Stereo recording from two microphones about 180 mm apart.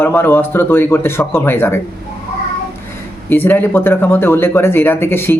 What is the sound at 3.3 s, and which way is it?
Speech, 10° left (ahead or behind).